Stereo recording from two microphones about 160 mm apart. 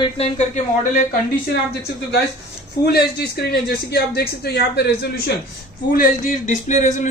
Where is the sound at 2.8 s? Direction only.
90° left.